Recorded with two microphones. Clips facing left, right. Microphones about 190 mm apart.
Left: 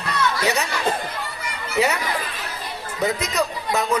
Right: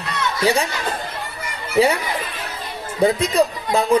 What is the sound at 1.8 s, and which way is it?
Speech, 30° right (ahead or behind).